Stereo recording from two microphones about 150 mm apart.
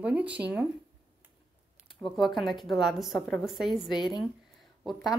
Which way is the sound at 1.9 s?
Centre (ahead or behind).